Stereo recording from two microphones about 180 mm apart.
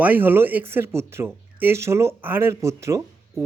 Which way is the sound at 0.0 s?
10° right (ahead or behind).